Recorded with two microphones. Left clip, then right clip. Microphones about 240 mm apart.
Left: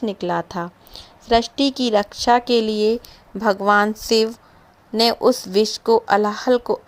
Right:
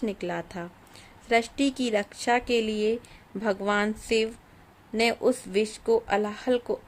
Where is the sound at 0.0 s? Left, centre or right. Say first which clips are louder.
Left 6 dB; centre.